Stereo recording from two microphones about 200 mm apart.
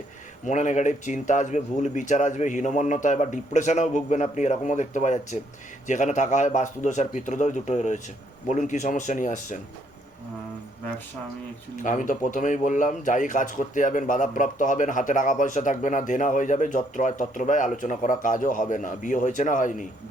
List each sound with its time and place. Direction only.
0.4 s speech: 40° left (ahead or behind)
11.8 s speech: 40° left (ahead or behind)